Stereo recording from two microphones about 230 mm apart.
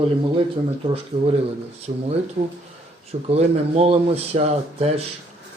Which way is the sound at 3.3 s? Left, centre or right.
Right.